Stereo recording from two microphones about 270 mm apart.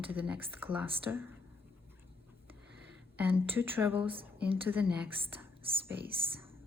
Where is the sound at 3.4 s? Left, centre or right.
Centre.